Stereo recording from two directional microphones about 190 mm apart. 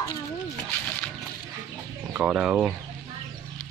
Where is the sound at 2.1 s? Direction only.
5° right (ahead or behind).